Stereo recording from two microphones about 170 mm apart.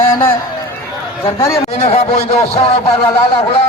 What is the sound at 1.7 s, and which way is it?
Speech, 35° left (ahead or behind).